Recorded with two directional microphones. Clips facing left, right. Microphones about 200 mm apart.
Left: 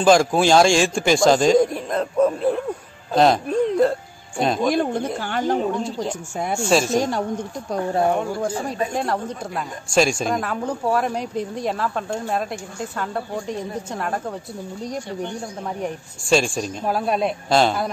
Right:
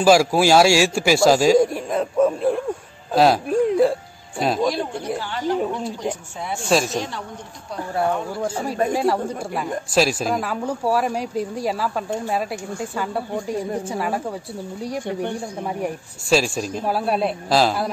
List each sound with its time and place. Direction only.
0.0 s a man's voice: 5° right (ahead or behind)
6.5 s speech: centre (ahead or behind)
7.0 s a woman's voice: 45° left (ahead or behind)
8.4 s speech: 5° right (ahead or behind)
15.8 s speech: 5° right (ahead or behind)